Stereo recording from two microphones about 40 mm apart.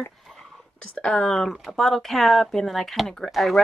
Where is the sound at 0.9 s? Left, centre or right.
Left.